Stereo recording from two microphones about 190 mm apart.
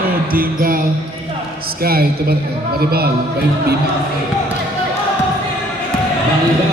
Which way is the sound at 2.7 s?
55° right (ahead or behind).